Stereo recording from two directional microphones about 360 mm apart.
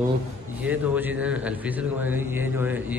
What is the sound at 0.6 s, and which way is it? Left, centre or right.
A man's voice, centre.